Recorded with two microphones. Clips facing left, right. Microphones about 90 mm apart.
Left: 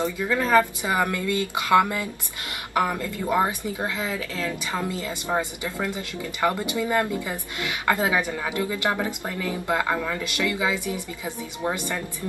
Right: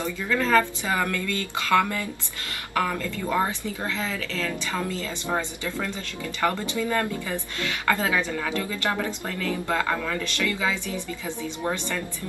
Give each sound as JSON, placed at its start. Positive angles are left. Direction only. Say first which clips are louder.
{"t": 0.0, "sound": "speech", "louder": "left 2 dB", "side_deg": 20}